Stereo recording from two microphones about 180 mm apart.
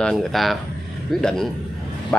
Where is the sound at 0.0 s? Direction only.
Centre (ahead or behind).